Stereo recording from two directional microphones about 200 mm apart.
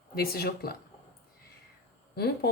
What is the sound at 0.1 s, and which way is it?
Speech, 50° left (ahead or behind).